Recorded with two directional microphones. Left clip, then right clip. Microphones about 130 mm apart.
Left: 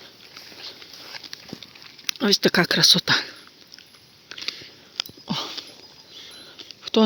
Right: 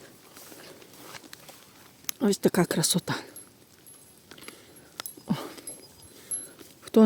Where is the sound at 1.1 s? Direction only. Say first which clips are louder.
Left 7 dB; 25° left (ahead or behind).